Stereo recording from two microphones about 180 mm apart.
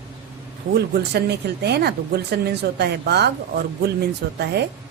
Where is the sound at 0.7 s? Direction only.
65° right (ahead or behind).